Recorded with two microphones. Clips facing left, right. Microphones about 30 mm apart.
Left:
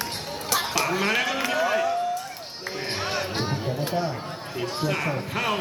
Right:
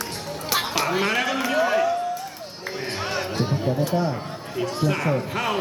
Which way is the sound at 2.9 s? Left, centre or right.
Centre.